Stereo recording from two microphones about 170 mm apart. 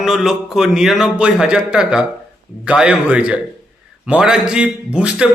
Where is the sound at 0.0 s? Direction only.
Centre (ahead or behind).